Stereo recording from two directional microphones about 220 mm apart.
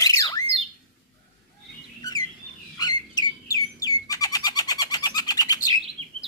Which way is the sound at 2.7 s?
20° left (ahead or behind).